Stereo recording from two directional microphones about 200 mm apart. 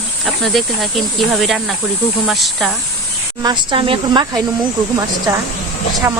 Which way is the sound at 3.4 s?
25° right (ahead or behind).